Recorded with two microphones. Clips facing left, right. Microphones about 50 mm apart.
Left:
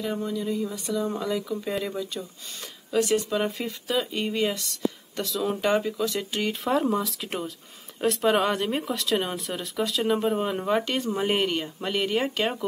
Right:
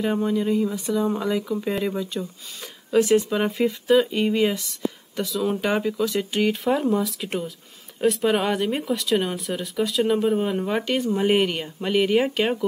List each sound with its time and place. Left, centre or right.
0.0 s speech: right
0.6 s speech: centre